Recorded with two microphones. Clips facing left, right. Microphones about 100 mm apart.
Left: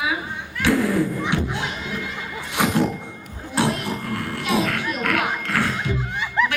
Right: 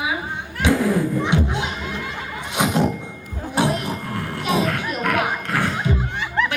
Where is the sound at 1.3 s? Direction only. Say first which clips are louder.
Right 3 dB; 20° right (ahead or behind).